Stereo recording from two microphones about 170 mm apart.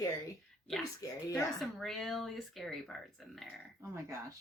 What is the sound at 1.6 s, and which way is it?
Speech, centre (ahead or behind).